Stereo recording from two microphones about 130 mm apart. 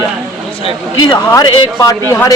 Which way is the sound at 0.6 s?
35° left (ahead or behind).